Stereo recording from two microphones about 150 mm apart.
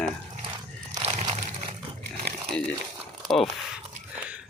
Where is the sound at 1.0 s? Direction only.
45° right (ahead or behind).